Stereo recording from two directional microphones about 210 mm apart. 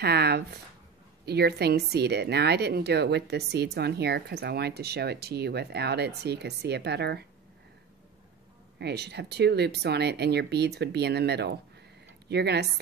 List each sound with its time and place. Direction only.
0.0 s speech: 50° right (ahead or behind)
8.7 s speech: 50° right (ahead or behind)